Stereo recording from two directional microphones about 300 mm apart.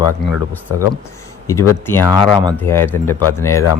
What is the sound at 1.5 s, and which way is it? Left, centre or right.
Speech, centre.